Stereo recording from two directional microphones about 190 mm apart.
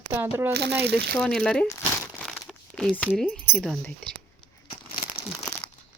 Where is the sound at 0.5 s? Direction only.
60° right (ahead or behind).